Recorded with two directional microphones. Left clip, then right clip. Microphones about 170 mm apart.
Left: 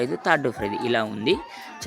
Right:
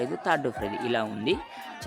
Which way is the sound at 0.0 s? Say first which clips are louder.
Left 5 dB; 15° left (ahead or behind).